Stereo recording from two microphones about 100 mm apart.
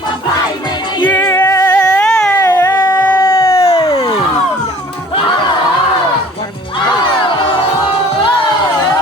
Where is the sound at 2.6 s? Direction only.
45° left (ahead or behind).